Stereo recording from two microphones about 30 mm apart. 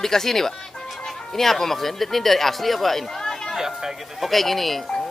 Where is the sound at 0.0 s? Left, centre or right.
Centre.